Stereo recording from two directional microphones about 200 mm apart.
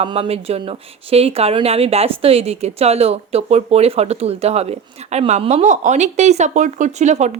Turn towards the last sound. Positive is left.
turn(degrees=-35)  # may be behind; listen again after turning